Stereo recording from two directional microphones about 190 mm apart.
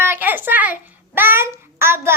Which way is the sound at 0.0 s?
10° right (ahead or behind).